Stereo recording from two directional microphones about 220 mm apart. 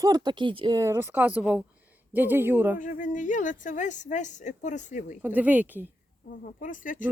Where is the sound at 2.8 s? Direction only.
35° left (ahead or behind).